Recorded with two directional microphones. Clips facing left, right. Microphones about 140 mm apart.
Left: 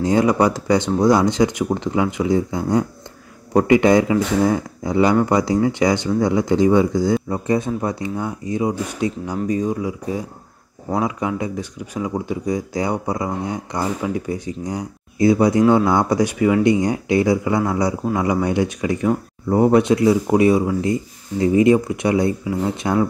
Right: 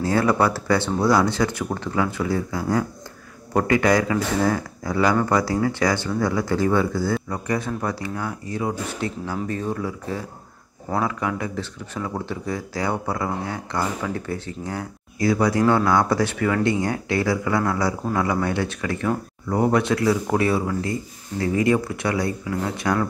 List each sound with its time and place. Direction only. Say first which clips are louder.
0.0 s speech: left 4 dB; 20° left (ahead or behind)